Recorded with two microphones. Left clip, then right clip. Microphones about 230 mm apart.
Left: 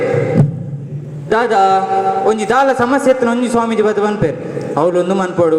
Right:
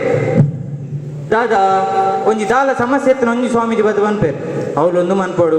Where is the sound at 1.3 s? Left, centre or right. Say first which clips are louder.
Left 1 dB; left.